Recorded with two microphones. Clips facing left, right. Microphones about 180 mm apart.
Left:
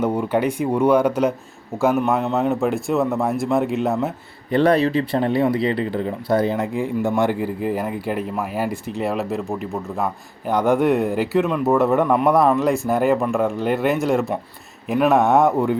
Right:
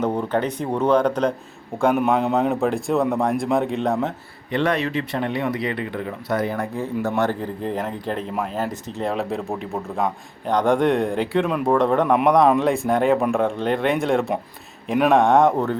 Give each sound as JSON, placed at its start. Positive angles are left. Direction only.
{"t": 0.0, "sound": "speech", "side_deg": 10}
{"t": 4.5, "sound": "speech", "side_deg": 35}
{"t": 6.7, "sound": "speech", "side_deg": 15}
{"t": 12.0, "sound": "speech", "side_deg": -10}
{"t": 12.5, "sound": "speech", "side_deg": 0}